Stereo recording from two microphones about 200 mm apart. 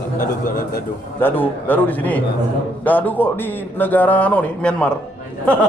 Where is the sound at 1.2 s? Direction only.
10° left (ahead or behind).